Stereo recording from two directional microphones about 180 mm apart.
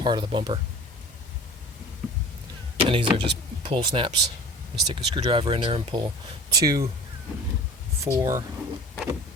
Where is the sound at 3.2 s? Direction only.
30° right (ahead or behind).